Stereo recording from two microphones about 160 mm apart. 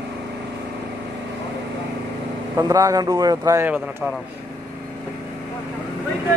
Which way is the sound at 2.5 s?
20° right (ahead or behind).